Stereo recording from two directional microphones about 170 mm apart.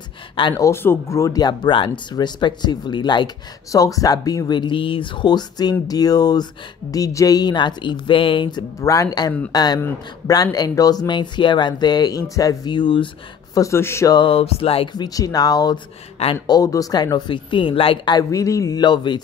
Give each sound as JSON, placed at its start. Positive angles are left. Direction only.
{"t": 0.4, "sound": "speech", "side_deg": 25}
{"t": 13.6, "sound": "speech", "side_deg": 15}
{"t": 15.0, "sound": "speech", "side_deg": 20}